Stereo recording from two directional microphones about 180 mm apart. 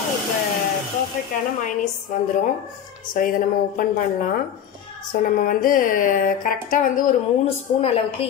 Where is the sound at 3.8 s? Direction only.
50° left (ahead or behind).